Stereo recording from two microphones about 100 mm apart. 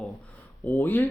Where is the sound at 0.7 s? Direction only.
20° left (ahead or behind).